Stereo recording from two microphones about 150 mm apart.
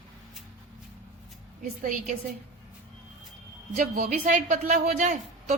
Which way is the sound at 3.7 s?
60° right (ahead or behind).